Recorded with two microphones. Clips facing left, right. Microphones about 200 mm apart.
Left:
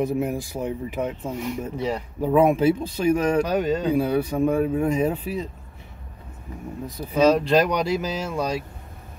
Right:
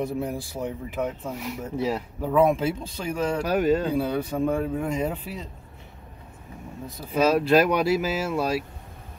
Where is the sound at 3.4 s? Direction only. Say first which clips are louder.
Right 1 dB; 5° right (ahead or behind).